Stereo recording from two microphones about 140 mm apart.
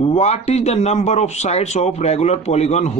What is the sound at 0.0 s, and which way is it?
A man's voice, 50° left (ahead or behind).